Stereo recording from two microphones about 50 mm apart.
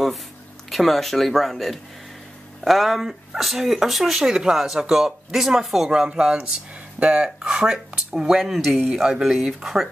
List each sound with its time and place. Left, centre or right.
0.7 s speech: centre; by 7.2 s right
7.4 s speech: centre